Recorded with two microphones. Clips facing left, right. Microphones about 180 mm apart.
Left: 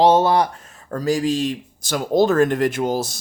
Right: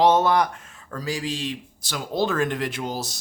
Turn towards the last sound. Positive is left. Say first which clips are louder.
# left 9 dB
turn(degrees=50)  # may be behind; listen again after turning